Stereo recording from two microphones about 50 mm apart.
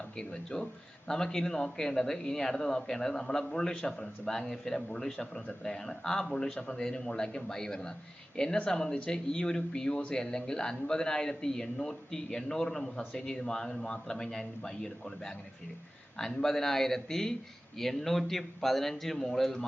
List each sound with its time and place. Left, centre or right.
0.2 s a man's voice: centre